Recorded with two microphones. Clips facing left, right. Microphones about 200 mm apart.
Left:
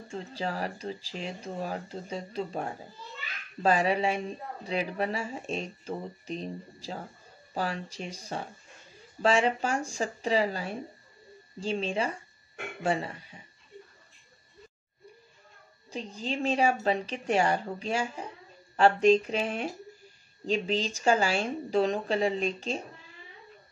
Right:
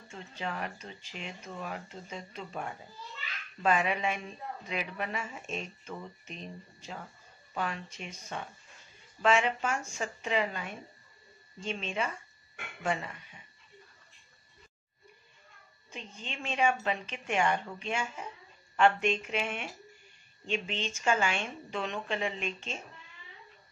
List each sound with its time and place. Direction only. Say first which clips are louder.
0.1 s speech: left 5 dB; 35° left (ahead or behind)
15.9 s speech: left 10 dB; 35° left (ahead or behind)